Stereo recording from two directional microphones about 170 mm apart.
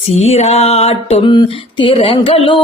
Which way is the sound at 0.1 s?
40° left (ahead or behind).